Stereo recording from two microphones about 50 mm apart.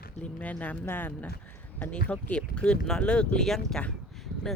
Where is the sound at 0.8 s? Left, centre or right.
Left.